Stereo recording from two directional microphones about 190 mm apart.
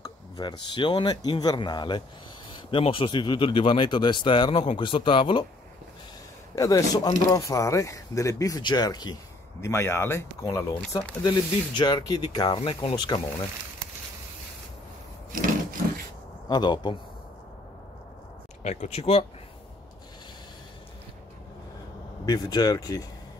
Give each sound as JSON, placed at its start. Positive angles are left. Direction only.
{"t": 0.0, "sound": "speech", "side_deg": 20}
{"t": 6.5, "sound": "speech", "side_deg": 15}
{"t": 16.4, "sound": "speech", "side_deg": 20}
{"t": 18.6, "sound": "speech", "side_deg": 35}
{"t": 22.2, "sound": "speech", "side_deg": 20}